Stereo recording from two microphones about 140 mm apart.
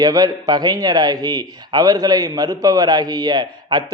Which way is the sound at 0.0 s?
25° right (ahead or behind).